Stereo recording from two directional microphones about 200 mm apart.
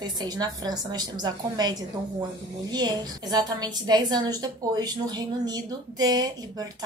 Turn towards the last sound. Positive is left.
turn(degrees=-20)  # may be behind; listen again after turning